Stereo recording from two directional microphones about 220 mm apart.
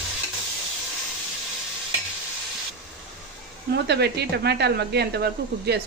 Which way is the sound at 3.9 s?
50° right (ahead or behind).